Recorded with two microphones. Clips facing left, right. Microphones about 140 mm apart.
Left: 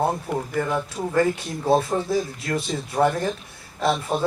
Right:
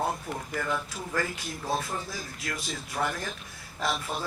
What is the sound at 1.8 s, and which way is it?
Speech, 25° left (ahead or behind).